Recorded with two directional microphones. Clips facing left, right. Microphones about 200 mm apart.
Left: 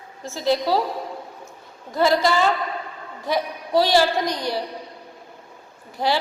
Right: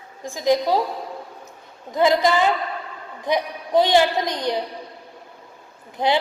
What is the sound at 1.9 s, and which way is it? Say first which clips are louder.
A woman's voice: right 1 dB; 20° right (ahead or behind).